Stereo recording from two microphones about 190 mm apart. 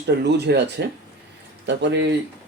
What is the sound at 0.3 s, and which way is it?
Speech, 65° right (ahead or behind).